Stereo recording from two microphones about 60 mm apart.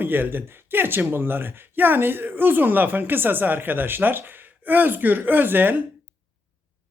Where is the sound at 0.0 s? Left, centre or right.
Right.